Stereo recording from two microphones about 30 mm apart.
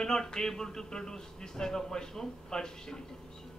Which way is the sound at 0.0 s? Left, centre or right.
Left.